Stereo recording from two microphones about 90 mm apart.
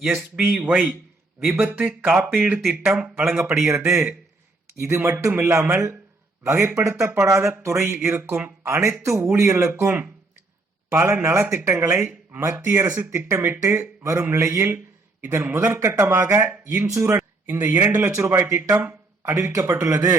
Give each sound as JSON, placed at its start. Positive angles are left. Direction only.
{"t": 0.0, "sound": "speech", "side_deg": -5}
{"t": 0.5, "sound": "a man's voice", "side_deg": -15}
{"t": 10.9, "sound": "a man's voice", "side_deg": -30}
{"t": 16.8, "sound": "a man's voice", "side_deg": -35}
{"t": 17.2, "sound": "speech", "side_deg": -20}
{"t": 18.1, "sound": "speech", "side_deg": -35}